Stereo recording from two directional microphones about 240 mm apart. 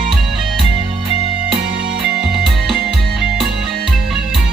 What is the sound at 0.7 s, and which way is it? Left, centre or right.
Music, right.